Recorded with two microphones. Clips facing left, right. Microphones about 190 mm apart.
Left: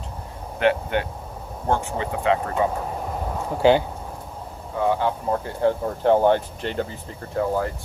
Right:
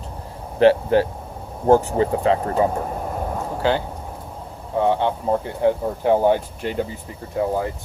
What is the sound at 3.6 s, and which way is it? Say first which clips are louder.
Speech: left 5 dB; 15° left (ahead or behind).